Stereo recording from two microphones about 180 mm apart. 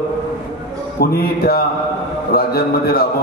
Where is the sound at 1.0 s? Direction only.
55° left (ahead or behind).